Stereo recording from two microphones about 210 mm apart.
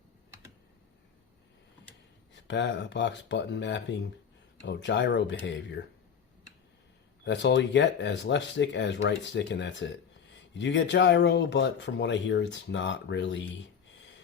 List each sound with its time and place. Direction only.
2.3 s speech: 60° left (ahead or behind)
7.3 s speech: 60° left (ahead or behind)